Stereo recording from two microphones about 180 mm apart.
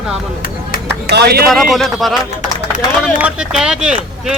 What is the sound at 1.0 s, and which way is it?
Speech, 65° right (ahead or behind).